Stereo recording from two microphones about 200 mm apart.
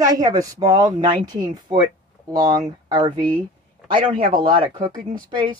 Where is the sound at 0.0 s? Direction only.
20° right (ahead or behind).